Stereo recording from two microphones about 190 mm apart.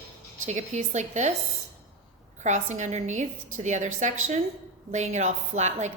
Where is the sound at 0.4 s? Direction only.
40° right (ahead or behind).